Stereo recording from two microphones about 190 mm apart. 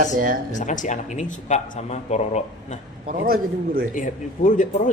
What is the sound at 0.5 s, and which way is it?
A man's voice, 40° left (ahead or behind).